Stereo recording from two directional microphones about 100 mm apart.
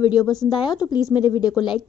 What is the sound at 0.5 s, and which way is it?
Speech, 50° left (ahead or behind).